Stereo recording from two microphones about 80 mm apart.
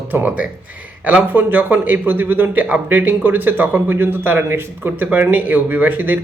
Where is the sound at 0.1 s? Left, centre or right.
Centre.